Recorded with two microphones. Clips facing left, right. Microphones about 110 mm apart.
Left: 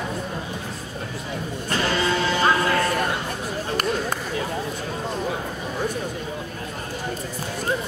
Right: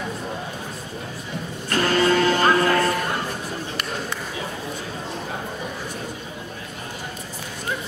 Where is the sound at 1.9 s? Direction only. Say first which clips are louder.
Right 5 dB; 50° right (ahead or behind).